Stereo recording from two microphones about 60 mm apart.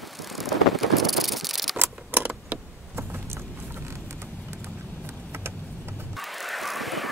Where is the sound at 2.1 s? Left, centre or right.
Right.